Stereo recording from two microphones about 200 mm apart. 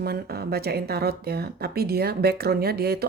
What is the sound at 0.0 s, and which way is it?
Speech, 50° right (ahead or behind).